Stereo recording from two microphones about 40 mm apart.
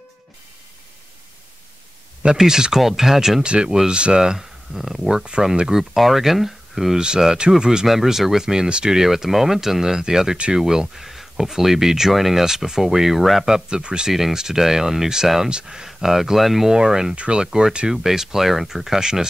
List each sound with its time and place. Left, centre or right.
2.3 s speech: centre
3.4 s speech: right
4.2 s speech: centre
5.1 s speech: right
5.7 s speech: centre
7.2 s speech: centre
7.8 s speech: centre
13.7 s speech: centre
14.1 s speech: centre
15.9 s speech: centre
16.7 s speech: centre
17.1 s speech: right